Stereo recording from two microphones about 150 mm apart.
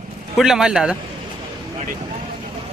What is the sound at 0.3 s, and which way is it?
Speech, 5° right (ahead or behind).